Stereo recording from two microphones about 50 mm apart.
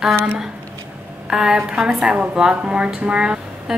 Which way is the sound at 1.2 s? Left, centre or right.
Centre.